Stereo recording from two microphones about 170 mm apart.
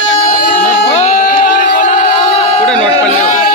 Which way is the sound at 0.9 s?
45° left (ahead or behind).